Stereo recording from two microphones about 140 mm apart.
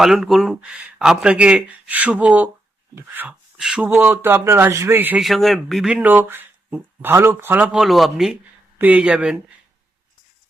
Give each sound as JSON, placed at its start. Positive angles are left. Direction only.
{"t": 0.0, "sound": "speech", "side_deg": 0}
{"t": 5.2, "sound": "speech", "side_deg": 0}